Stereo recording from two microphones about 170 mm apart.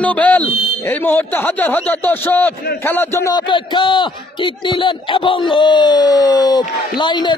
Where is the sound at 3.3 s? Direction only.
25° left (ahead or behind).